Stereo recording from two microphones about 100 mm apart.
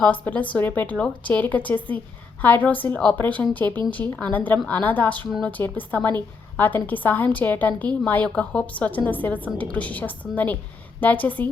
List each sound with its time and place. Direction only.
0.0 s a woman's voice: 15° left (ahead or behind)